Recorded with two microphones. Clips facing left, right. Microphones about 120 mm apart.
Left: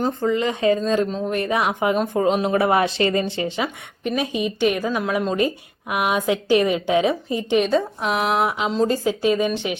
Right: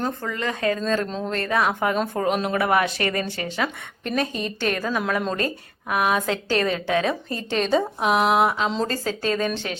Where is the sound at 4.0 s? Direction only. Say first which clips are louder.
Left 3 dB; 10° left (ahead or behind).